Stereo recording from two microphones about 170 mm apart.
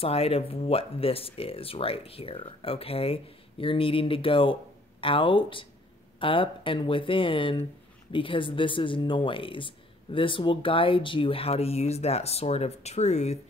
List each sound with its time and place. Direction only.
0.0 s speech: 35° left (ahead or behind)